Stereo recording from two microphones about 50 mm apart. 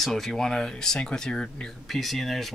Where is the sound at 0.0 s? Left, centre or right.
Centre.